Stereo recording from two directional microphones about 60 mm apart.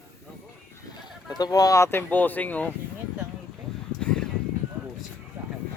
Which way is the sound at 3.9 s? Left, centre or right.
Centre.